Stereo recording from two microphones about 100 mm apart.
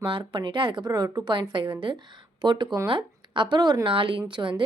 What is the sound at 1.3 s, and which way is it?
A woman's voice, 55° right (ahead or behind).